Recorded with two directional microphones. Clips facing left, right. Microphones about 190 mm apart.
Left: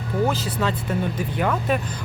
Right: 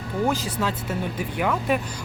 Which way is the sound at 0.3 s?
10° right (ahead or behind).